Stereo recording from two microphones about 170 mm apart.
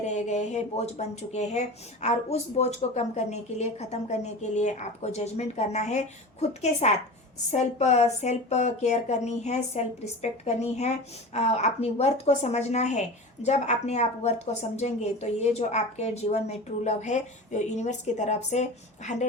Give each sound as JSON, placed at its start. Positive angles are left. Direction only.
{"t": 0.0, "sound": "a woman's voice", "side_deg": 45}